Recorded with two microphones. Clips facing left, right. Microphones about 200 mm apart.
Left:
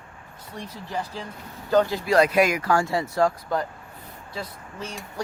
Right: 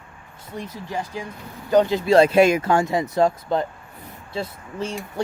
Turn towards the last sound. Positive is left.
turn(degrees=-25)  # may be behind; listen again after turning